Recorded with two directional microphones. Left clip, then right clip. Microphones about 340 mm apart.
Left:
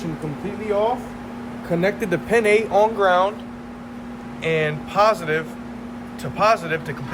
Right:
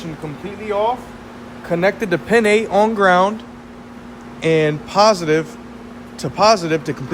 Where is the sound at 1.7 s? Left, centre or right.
Centre.